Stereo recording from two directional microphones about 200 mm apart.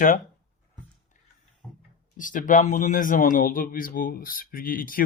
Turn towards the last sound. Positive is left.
turn(degrees=45)  # may be behind; listen again after turning